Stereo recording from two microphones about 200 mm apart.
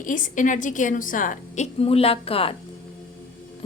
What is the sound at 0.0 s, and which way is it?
A woman's voice, 40° left (ahead or behind).